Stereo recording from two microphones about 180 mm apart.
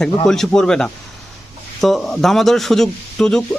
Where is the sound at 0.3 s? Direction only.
5° left (ahead or behind).